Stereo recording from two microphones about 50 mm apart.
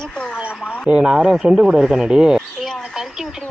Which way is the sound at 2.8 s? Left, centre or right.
Centre.